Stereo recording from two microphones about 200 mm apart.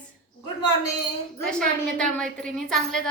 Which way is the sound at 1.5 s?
5° left (ahead or behind).